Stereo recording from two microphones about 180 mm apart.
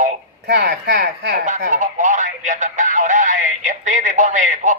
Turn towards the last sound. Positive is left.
turn(degrees=-45)  # may be behind; listen again after turning